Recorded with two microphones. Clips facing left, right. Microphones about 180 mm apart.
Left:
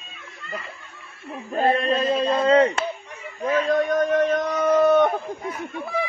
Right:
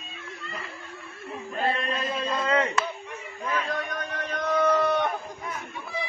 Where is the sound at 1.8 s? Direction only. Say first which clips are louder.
Left 9 dB; 30° left (ahead or behind); by 5.2 s 50° left (ahead or behind).